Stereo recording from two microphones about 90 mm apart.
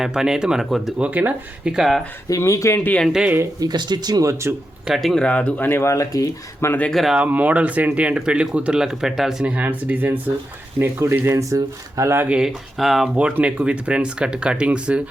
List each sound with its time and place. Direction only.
0.0 s speech: 5° right (ahead or behind)
1.0 s speech: 15° right (ahead or behind)
2.3 s speech: 35° left (ahead or behind)
3.1 s speech: 10° right (ahead or behind)
3.6 s speech: 50° right (ahead or behind); by 4.5 s 35° right (ahead or behind)
4.9 s speech: 5° left (ahead or behind)
5.6 s speech: 30° left (ahead or behind)
6.7 s speech: 20° left (ahead or behind)
6.9 s speech: 5° right (ahead or behind)
7.3 s speech: 15° right (ahead or behind)
9.5 s speech: 15° right (ahead or behind); by 12.1 s 40° right (ahead or behind)
12.3 s speech: 5° right (ahead or behind)
13.1 s speech: 15° right (ahead or behind)